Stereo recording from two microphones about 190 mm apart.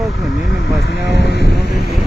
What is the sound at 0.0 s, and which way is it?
Vehicle, centre (ahead or behind).